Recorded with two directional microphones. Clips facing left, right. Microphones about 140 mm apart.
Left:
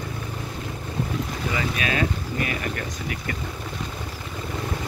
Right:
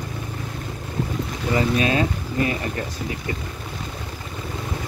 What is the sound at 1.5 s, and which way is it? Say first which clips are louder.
Speech: right 7 dB; 30° right (ahead or behind).